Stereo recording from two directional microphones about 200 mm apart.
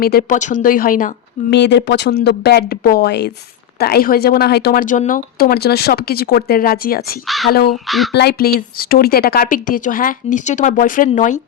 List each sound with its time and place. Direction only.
0.0 s speech: 50° left (ahead or behind)
7.3 s speech: centre (ahead or behind)
8.1 s speech: 55° left (ahead or behind); by 11.3 s 40° left (ahead or behind)